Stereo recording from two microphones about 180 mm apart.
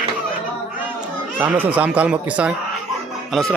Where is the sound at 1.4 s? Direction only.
10° right (ahead or behind).